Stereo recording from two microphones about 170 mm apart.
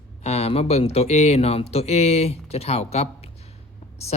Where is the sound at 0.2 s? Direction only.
40° left (ahead or behind).